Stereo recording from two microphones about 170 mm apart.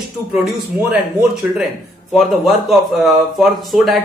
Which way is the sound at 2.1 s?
Centre (ahead or behind).